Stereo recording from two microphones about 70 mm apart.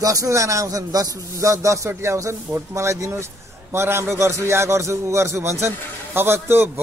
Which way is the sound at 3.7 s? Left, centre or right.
Right.